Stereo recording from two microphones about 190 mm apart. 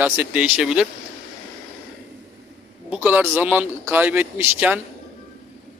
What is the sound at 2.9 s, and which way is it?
A man's voice, 10° right (ahead or behind).